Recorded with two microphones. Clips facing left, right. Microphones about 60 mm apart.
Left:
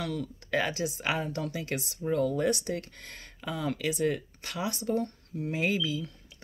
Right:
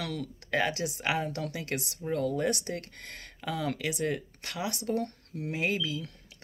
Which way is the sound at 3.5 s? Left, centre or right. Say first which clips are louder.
Left 1 dB; right.